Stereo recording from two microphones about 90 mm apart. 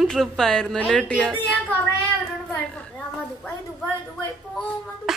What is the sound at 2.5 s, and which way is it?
A woman's voice, 15° left (ahead or behind).